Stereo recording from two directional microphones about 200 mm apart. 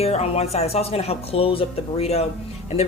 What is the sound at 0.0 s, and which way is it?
Speech, 30° left (ahead or behind).